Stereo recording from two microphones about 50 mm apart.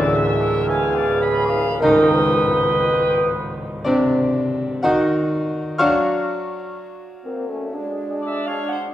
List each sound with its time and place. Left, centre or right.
0.1 s music: centre
1.8 s music: centre
2.1 s music: centre
2.6 s music: centre
8.2 s music: left